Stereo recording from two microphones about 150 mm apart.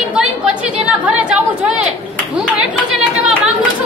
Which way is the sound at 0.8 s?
10° right (ahead or behind).